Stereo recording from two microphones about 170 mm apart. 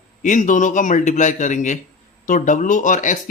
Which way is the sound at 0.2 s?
45° left (ahead or behind).